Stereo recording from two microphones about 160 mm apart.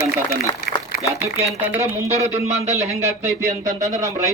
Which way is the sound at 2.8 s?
40° right (ahead or behind).